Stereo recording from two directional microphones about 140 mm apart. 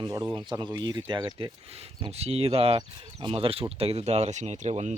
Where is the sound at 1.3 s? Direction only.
40° right (ahead or behind).